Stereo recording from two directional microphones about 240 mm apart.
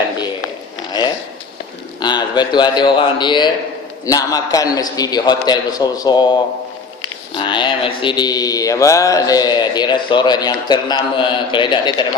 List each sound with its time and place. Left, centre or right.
2.0 s a man's voice: centre
4.0 s mantra: centre